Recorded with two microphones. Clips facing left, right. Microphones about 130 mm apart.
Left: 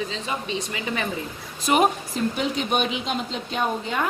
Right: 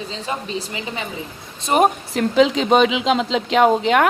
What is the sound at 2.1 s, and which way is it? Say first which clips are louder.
Speech: right 9 dB; 90° right.